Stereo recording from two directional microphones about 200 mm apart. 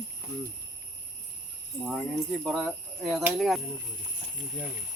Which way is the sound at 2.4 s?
Centre (ahead or behind).